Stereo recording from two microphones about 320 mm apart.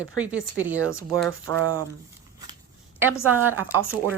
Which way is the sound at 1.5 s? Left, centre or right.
Right.